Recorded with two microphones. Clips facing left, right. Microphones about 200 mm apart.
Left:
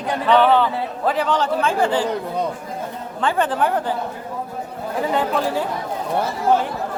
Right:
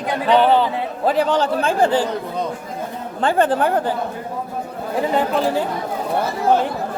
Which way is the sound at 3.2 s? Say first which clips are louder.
Right 3 dB; 40° right (ahead or behind).